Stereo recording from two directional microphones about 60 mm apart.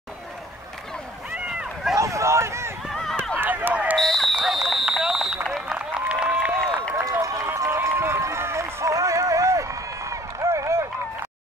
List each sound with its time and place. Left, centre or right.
2.0 s a sound: right
2.9 s run: centre
3.3 s run: right
4.0 s a sound: centre
5.0 s vehicle: centre
5.7 s applause: centre
6.0 s a sound: right
7.0 s run: right
7.9 s run: right
8.8 s run: right